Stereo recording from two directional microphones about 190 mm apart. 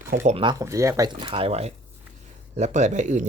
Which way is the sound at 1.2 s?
30° right (ahead or behind).